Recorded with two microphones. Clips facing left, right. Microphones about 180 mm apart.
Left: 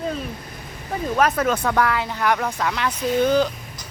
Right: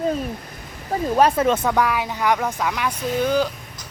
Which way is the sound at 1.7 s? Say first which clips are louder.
Even; 15° right (ahead or behind).